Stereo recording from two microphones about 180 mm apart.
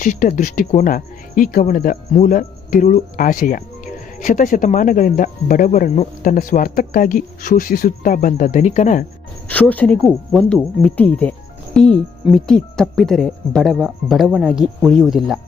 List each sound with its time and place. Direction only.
0.0 s speech: 45° left (ahead or behind)
9.5 s speech: 10° left (ahead or behind)